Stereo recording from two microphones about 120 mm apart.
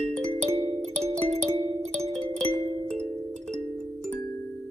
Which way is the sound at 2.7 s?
65° right (ahead or behind).